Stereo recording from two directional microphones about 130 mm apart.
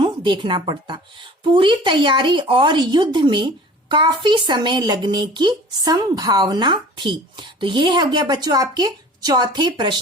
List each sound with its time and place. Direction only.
0.0 s speech: 35° right (ahead or behind)